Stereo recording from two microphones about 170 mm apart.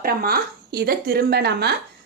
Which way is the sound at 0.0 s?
60° right (ahead or behind).